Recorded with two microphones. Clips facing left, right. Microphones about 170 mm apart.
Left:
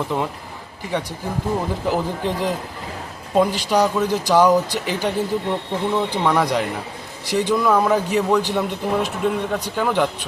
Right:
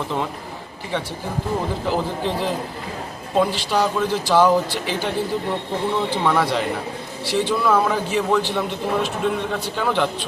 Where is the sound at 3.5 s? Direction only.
15° left (ahead or behind).